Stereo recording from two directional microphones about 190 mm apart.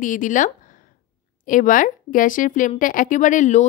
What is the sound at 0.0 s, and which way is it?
A woman's voice, 45° left (ahead or behind).